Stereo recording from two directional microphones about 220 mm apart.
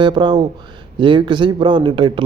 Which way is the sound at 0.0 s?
20° right (ahead or behind).